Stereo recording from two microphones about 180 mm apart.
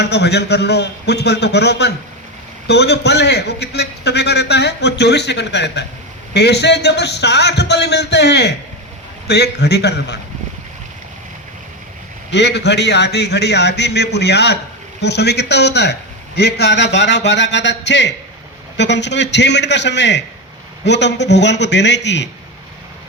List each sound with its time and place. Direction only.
0.0 s a man's voice: 70° left (ahead or behind)
12.3 s a man's voice: 70° left (ahead or behind)